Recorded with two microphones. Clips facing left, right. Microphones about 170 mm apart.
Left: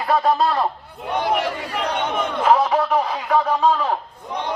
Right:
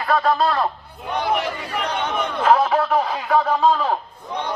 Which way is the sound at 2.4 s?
5° left (ahead or behind).